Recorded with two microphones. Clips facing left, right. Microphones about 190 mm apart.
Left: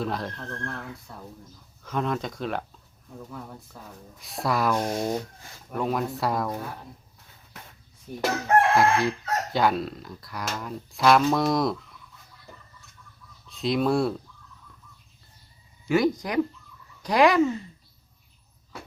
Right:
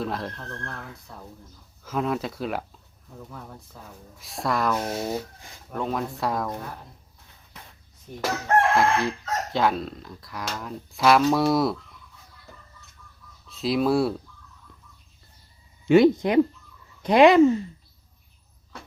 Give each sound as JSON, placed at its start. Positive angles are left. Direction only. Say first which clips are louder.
{"t": 0.0, "sound": "speech", "louder": "even", "side_deg": 0}
{"t": 8.1, "sound": "chicken", "louder": "left 2 dB", "side_deg": 5}
{"t": 8.7, "sound": "speech", "louder": "left 1 dB", "side_deg": 0}
{"t": 13.5, "sound": "speech", "louder": "right 1 dB", "side_deg": 0}
{"t": 15.9, "sound": "speech", "louder": "right 6 dB", "side_deg": -25}